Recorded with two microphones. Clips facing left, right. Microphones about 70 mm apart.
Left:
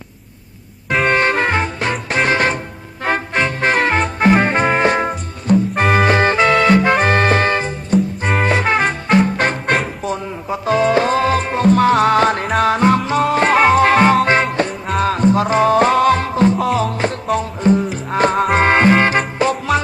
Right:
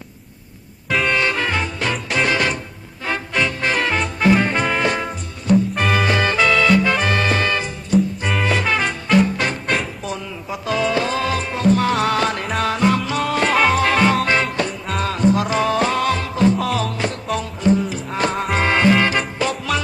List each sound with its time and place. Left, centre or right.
1.1 s music: left
10.1 s music: left
18.3 s music: left
18.6 s music: left